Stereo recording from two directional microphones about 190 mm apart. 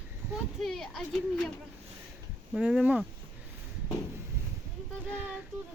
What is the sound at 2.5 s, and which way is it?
Speech, 5° right (ahead or behind).